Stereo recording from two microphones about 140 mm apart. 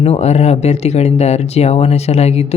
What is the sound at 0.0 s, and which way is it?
Speech, 50° left (ahead or behind).